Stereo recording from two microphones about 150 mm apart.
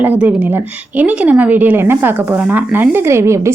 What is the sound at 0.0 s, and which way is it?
A woman's voice, 10° right (ahead or behind).